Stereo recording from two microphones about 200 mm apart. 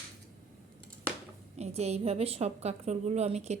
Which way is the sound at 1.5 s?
30° right (ahead or behind).